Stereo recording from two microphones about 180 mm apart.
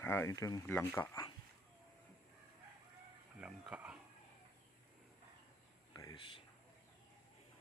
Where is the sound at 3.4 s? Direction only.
5° right (ahead or behind).